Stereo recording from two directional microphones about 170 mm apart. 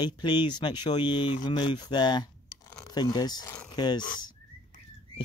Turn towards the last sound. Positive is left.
turn(degrees=25)  # may be behind; listen again after turning